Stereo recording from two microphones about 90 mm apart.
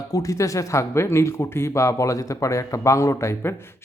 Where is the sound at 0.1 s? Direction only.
40° left (ahead or behind).